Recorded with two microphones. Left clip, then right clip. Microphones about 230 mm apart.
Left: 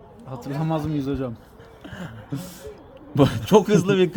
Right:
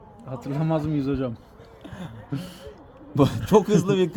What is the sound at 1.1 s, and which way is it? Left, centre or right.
Speech, right.